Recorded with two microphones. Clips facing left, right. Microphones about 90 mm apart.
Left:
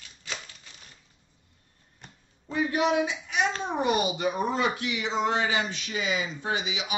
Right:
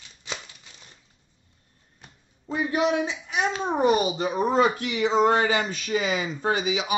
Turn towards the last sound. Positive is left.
turn(degrees=-45)  # may be behind; listen again after turning